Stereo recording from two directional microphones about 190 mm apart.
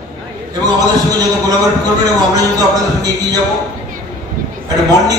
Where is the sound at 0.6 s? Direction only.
20° right (ahead or behind).